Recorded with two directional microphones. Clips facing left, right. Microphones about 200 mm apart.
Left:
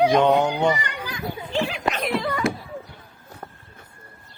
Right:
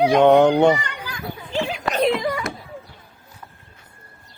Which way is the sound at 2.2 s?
15° right (ahead or behind).